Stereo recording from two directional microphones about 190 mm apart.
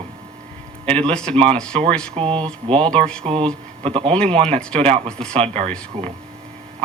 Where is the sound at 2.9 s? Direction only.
5° left (ahead or behind).